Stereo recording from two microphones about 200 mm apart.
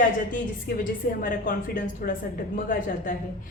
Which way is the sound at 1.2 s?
45° left (ahead or behind).